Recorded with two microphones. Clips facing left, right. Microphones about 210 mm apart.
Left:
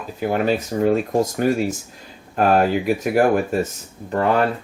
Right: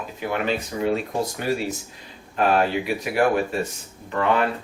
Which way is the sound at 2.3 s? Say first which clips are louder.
Left 3 dB; 45° left (ahead or behind).